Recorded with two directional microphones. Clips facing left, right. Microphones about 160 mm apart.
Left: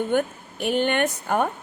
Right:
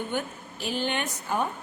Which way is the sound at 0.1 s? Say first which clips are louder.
Left 8 dB; 55° left (ahead or behind).